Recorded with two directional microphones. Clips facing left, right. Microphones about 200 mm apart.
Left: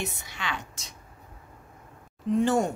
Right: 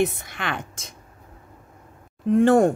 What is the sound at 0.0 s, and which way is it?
Speech, 55° right (ahead or behind).